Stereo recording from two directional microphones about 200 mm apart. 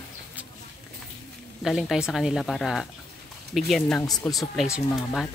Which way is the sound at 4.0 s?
15° left (ahead or behind).